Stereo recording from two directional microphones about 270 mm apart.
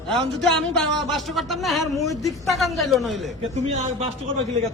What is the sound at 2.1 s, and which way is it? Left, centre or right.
Speech, centre.